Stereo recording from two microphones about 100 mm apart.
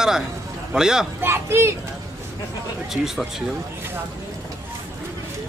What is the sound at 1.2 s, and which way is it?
Speech, 25° right (ahead or behind).